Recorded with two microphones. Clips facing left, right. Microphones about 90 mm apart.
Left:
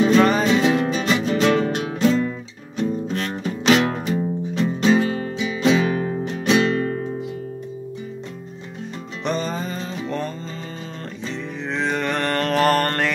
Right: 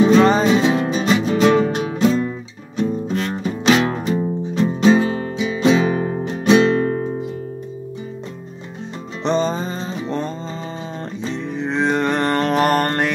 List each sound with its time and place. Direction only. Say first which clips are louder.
0.0 s music: right 3 dB; 25° right (ahead or behind)
2.8 s music: right 3 dB; 25° right (ahead or behind)
9.2 s music: right 5 dB; 25° right (ahead or behind)
11.3 s music: right 5 dB; 20° right (ahead or behind)